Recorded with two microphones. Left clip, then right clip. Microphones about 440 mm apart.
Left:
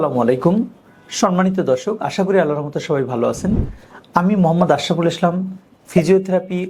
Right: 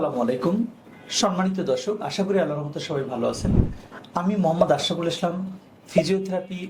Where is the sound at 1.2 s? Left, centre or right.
Left.